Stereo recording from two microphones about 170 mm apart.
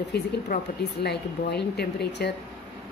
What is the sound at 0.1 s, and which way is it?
A woman's voice, 75° left (ahead or behind).